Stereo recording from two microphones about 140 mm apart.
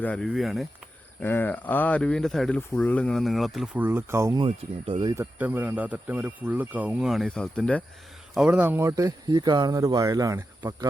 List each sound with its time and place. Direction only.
0.0 s speech: 10° left (ahead or behind)
0.3 s speech: centre (ahead or behind)
1.2 s speech: 15° left (ahead or behind); by 3.8 s centre (ahead or behind)
3.8 s speech: 15° right (ahead or behind)
4.4 s speech: 35° right (ahead or behind)
5.1 s speech: 15° right (ahead or behind); by 7.9 s 10° left (ahead or behind)
8.4 s speech: 10° right (ahead or behind); by 10.8 s 25° right (ahead or behind)